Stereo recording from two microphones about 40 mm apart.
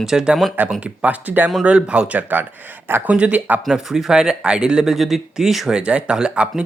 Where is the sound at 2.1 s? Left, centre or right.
Right.